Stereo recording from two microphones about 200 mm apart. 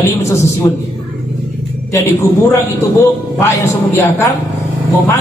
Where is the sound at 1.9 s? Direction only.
15° left (ahead or behind).